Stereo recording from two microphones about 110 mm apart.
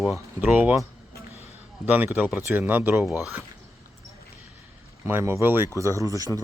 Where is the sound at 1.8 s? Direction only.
15° right (ahead or behind).